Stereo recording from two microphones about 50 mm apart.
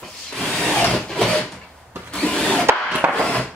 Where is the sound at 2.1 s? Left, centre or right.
Centre.